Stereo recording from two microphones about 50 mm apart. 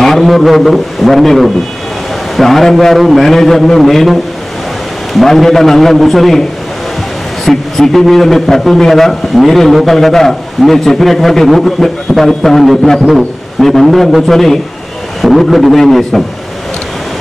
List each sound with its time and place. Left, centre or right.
0.0 s a man's voice: centre
7.4 s a man's voice: centre